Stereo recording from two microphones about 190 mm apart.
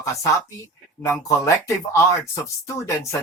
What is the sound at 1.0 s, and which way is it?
Speech, 15° left (ahead or behind).